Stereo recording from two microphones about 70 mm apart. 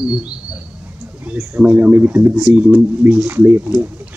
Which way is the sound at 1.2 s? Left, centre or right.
Right.